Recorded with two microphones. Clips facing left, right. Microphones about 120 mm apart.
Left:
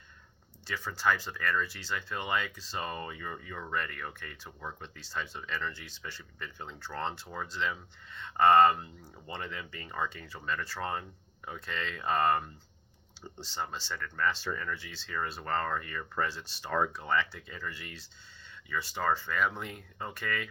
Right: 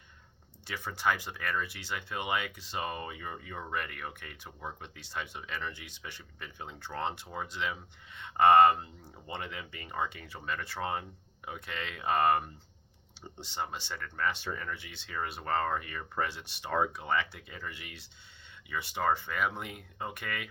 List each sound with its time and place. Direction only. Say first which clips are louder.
0.7 s speech: left 1 dB; 25° right (ahead or behind)
13.5 s speech: even; 20° right (ahead or behind)